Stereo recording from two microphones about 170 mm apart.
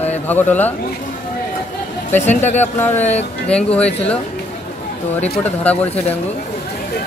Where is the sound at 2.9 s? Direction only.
40° left (ahead or behind).